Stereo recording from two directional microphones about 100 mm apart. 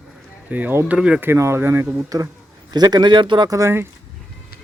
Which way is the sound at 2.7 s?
45° right (ahead or behind).